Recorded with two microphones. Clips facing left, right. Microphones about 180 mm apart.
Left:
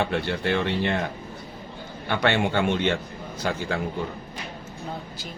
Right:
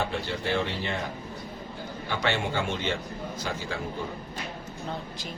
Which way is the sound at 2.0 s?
60° left (ahead or behind).